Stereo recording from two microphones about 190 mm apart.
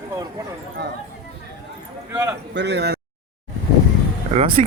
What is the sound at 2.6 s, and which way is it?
Speech, 65° right (ahead or behind).